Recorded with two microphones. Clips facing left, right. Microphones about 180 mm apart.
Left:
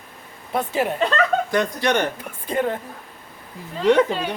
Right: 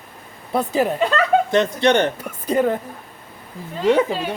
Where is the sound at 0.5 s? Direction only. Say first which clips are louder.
Right 3 dB; 40° right (ahead or behind).